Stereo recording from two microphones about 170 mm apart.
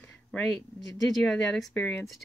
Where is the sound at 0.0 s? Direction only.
5° left (ahead or behind).